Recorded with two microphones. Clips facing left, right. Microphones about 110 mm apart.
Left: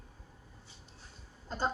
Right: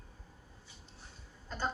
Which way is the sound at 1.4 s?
35° left (ahead or behind).